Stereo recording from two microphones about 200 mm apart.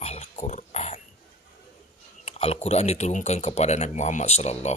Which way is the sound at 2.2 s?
30° left (ahead or behind).